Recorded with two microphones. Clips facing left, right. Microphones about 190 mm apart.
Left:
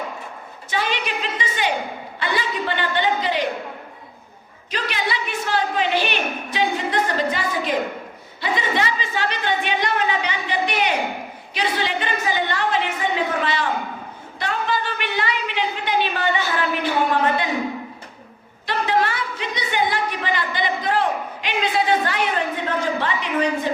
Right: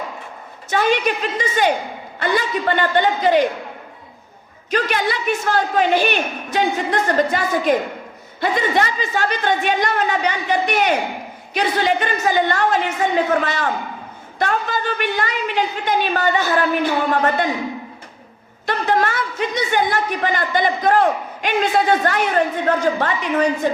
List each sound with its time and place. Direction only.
0.7 s a man's voice: 45° right (ahead or behind)
4.7 s a man's voice: 50° right (ahead or behind)
18.6 s a man's voice: 45° right (ahead or behind)